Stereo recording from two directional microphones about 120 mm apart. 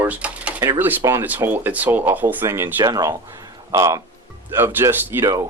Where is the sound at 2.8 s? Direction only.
30° right (ahead or behind).